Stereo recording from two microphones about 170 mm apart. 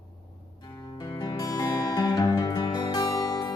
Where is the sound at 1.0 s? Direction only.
25° left (ahead or behind).